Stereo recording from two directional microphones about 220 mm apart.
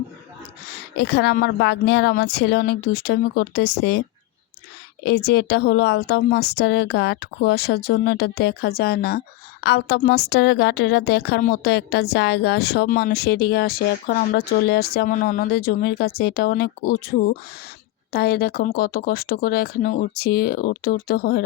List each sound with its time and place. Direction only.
0.9 s speech: 50° left (ahead or behind)
5.0 s speech: 45° left (ahead or behind)